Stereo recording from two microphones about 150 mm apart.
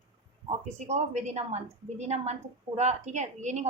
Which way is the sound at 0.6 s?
45° right (ahead or behind).